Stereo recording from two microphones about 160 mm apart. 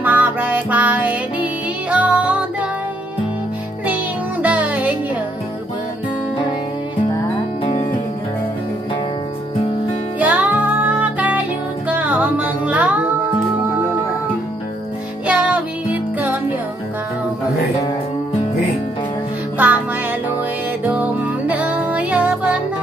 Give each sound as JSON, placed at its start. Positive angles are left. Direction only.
{"t": 0.0, "sound": "music", "side_deg": -10}
{"t": 3.8, "sound": "music", "side_deg": -10}
{"t": 7.6, "sound": "music", "side_deg": 45}
{"t": 10.1, "sound": "music", "side_deg": -10}
{"t": 15.2, "sound": "music", "side_deg": -10}
{"t": 19.6, "sound": "music", "side_deg": -10}
{"t": 20.8, "sound": "music", "side_deg": -10}